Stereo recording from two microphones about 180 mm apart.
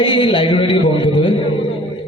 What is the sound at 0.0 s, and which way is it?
Speech, 25° left (ahead or behind).